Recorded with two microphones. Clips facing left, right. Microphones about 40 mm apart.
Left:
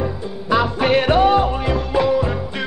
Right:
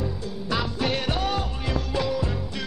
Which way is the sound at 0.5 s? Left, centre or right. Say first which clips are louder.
Left 10 dB; left.